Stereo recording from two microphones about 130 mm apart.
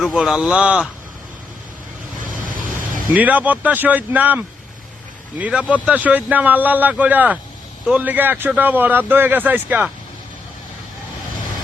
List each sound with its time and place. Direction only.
0.0 s speech: centre (ahead or behind)
2.2 s vehicle: 90° right
3.1 s speech: 10° right (ahead or behind)